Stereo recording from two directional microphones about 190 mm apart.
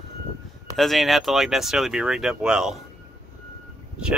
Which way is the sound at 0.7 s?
Centre (ahead or behind).